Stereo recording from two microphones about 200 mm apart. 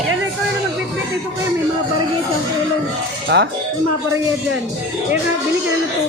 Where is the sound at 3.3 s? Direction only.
60° right (ahead or behind).